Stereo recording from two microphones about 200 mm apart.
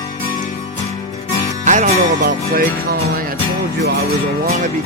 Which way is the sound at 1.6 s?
40° right (ahead or behind).